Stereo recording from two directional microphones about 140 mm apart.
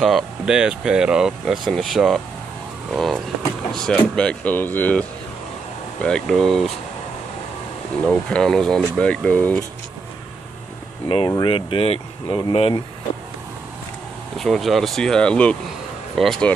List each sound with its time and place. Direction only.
0.0 s speech: 5° right (ahead or behind)
8.1 s speech: 5° left (ahead or behind)
11.1 s speech: 40° left (ahead or behind)
14.3 s speech: centre (ahead or behind)